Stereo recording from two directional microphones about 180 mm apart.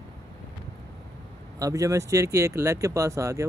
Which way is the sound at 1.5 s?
20° right (ahead or behind).